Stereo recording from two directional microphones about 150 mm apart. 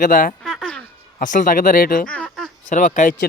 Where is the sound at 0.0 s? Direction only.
65° left (ahead or behind).